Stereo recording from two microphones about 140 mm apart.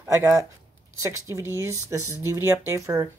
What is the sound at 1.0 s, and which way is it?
Speech, 20° right (ahead or behind).